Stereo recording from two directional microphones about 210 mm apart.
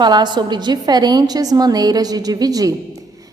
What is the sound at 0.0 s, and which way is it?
A woman's voice, 20° right (ahead or behind).